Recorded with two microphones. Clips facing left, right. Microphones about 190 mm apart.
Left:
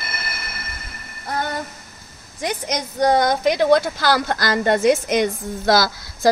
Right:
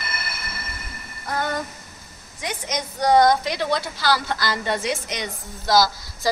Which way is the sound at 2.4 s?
45° left (ahead or behind).